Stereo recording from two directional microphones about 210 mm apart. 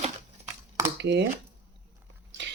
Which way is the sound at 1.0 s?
55° right (ahead or behind).